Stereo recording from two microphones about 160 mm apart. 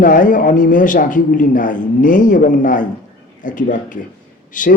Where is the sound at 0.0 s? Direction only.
55° left (ahead or behind).